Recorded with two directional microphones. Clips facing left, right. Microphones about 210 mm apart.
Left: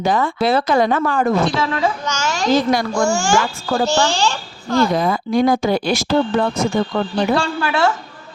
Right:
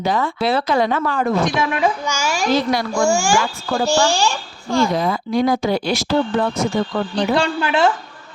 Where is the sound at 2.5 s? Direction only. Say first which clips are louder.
Left 3 dB; 45° left (ahead or behind).